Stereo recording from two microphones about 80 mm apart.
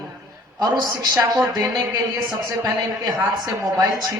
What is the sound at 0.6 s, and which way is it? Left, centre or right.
A woman's voice, right.